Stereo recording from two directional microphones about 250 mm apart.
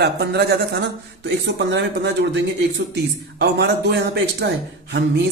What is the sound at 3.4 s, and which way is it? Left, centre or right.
A man's voice, right.